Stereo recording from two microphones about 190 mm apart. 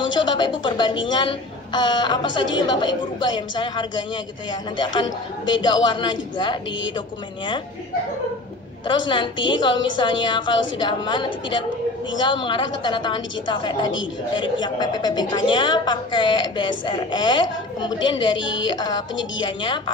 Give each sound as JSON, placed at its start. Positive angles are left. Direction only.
{"t": 0.1, "sound": "a woman's voice", "side_deg": 25}
{"t": 8.8, "sound": "a woman's voice", "side_deg": 25}
{"t": 18.4, "sound": "a woman's voice", "side_deg": 75}
{"t": 18.8, "sound": "a woman's voice", "side_deg": 20}